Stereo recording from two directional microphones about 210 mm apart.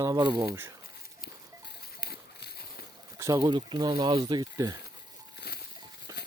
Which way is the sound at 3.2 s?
15° right (ahead or behind).